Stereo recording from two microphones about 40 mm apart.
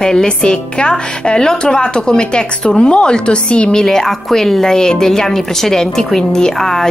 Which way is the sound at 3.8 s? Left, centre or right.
Centre.